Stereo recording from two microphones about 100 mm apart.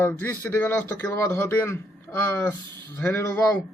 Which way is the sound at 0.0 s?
25° left (ahead or behind).